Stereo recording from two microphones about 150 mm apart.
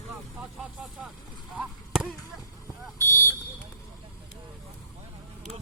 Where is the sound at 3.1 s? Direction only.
15° left (ahead or behind).